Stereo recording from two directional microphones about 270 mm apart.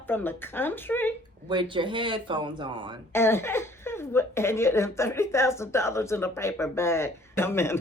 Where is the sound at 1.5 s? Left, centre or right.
Centre.